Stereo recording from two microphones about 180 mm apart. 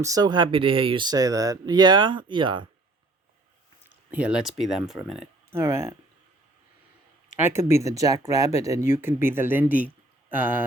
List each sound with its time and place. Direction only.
0.0 s speech: 20° right (ahead or behind)
3.8 s speech: 10° right (ahead or behind)
5.5 s speech: 15° right (ahead or behind)
7.3 s speech: 15° right (ahead or behind)